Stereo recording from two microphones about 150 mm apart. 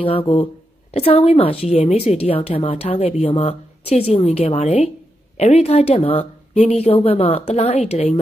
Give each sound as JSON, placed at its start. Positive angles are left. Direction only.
{"t": 0.0, "sound": "speech", "side_deg": 35}